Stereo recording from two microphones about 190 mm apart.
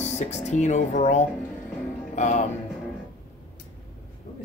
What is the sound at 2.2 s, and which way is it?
Speech, 40° left (ahead or behind).